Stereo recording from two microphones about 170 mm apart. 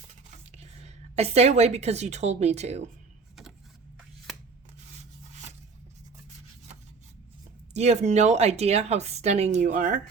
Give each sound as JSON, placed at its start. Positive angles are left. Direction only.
{"t": 0.5, "sound": "a woman's voice", "side_deg": -40}
{"t": 7.7, "sound": "speech", "side_deg": -40}